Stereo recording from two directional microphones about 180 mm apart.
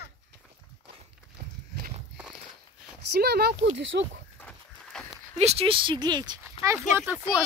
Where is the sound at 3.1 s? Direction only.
60° right (ahead or behind).